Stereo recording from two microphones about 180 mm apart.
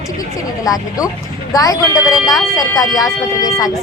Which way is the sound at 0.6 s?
20° left (ahead or behind).